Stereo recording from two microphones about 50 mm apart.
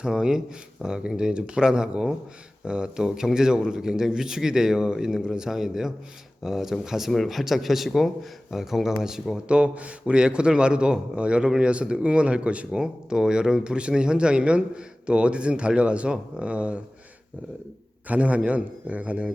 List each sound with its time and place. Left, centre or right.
0.0 s a man's voice: centre
9.5 s speech: right
18.1 s speech: right